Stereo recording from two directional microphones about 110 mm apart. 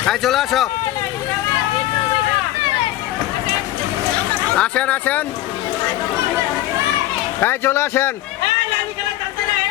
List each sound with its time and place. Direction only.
0.0 s speech: centre (ahead or behind)
4.5 s speech: 10° left (ahead or behind)
7.3 s a man's voice: 20° left (ahead or behind)